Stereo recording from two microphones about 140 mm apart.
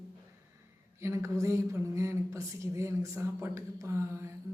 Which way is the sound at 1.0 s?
20° right (ahead or behind).